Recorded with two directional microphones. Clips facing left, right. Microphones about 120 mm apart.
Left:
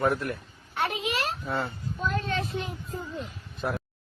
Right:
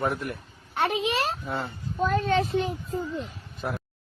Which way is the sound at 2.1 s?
35° right (ahead or behind).